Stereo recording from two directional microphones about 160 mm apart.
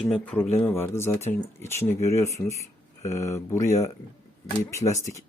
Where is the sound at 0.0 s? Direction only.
10° left (ahead or behind).